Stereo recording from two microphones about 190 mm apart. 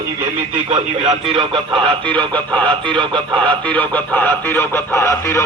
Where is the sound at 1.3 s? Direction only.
25° right (ahead or behind).